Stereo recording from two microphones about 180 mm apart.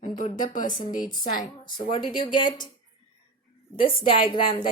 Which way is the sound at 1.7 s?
30° left (ahead or behind).